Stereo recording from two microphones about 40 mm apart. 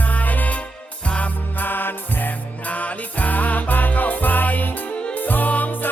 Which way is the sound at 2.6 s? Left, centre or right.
Left.